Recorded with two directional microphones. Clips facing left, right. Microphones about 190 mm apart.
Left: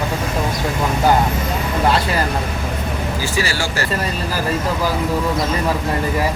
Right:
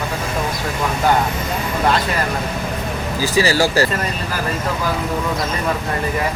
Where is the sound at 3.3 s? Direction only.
40° right (ahead or behind).